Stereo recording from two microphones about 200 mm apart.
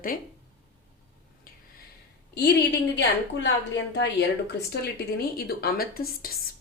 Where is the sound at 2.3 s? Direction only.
60° left (ahead or behind).